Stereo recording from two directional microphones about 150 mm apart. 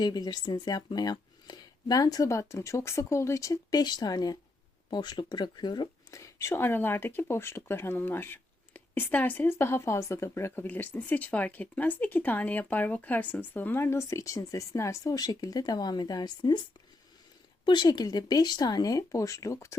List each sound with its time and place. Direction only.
0.0 s speech: 30° left (ahead or behind)
17.7 s speech: 30° left (ahead or behind)